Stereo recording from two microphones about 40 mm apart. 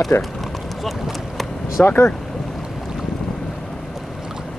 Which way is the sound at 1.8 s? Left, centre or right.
Left.